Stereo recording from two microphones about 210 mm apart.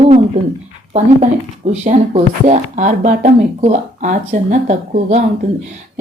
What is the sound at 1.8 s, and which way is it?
Speech, 35° right (ahead or behind).